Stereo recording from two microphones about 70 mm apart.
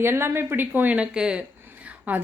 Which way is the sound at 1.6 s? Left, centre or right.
Right.